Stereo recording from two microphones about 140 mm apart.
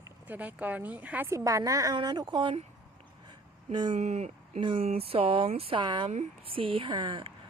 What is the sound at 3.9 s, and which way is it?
Speech, 55° right (ahead or behind).